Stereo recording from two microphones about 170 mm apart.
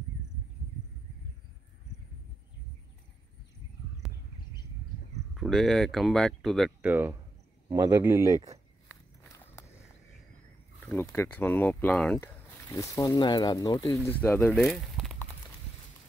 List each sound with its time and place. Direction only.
5.3 s speech: centre (ahead or behind)
6.8 s speech: 10° right (ahead or behind)
7.7 s speech: 20° right (ahead or behind)
9.3 s walk: 15° left (ahead or behind)
11.0 s speech: 10° left (ahead or behind)
14.0 s speech: 10° left (ahead or behind)
14.6 s a sound: centre (ahead or behind)